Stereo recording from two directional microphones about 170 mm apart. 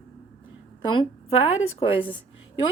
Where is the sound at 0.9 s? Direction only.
35° left (ahead or behind).